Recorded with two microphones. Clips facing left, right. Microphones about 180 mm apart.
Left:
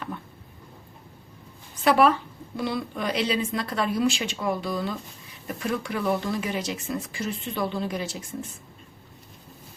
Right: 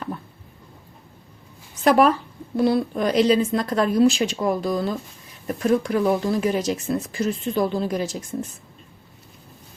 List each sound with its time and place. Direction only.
1.8 s speech: 45° right (ahead or behind)